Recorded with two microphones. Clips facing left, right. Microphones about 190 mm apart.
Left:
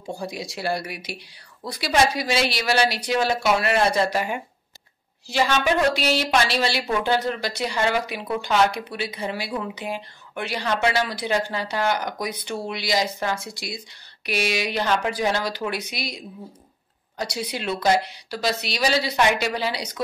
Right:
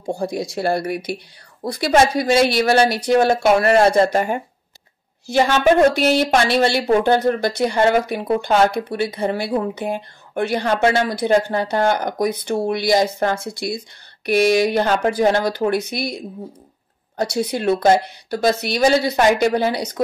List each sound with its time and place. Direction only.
0.0 s a woman's voice: 50° right (ahead or behind)
17.2 s a woman's voice: 50° right (ahead or behind)